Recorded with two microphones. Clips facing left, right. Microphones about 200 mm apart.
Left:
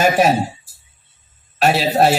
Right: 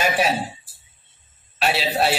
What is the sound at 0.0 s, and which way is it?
Speech, 45° left (ahead or behind).